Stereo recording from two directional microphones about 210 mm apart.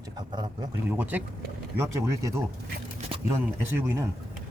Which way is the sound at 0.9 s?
10° right (ahead or behind).